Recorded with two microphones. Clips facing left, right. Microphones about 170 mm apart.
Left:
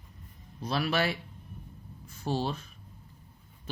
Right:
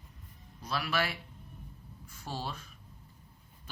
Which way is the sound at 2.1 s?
25° left (ahead or behind).